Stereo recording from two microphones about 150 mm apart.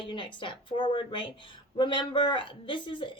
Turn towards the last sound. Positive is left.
turn(degrees=35)  # may be behind; listen again after turning